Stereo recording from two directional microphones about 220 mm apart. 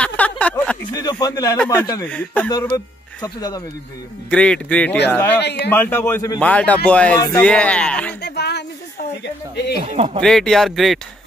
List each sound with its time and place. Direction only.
0.0 s a sound: 5° left (ahead or behind)
1.2 s speech: 15° left (ahead or behind)
4.3 s speech: 5° left (ahead or behind)
5.4 s speech: 50° left (ahead or behind)
5.7 s speech: 10° left (ahead or behind)
8.2 s a sound: 50° left (ahead or behind)
9.2 s speech: 50° left (ahead or behind)
9.9 s speech: 20° right (ahead or behind)
10.2 s speech: centre (ahead or behind)